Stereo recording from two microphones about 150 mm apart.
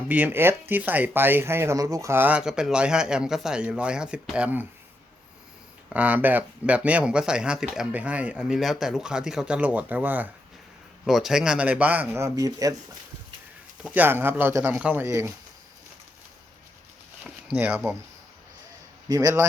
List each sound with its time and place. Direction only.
0.1 s speech: 15° right (ahead or behind)
5.9 s speech: 10° right (ahead or behind)
13.8 s a man's voice: 10° right (ahead or behind)
17.5 s speech: 10° right (ahead or behind)
19.0 s a man's voice: 25° right (ahead or behind)